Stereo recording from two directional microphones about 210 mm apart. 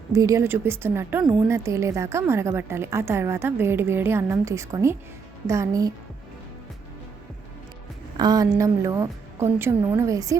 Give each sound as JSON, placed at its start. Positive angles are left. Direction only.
{"t": 0.1, "sound": "a woman's voice", "side_deg": -15}
{"t": 8.2, "sound": "a woman's voice", "side_deg": -15}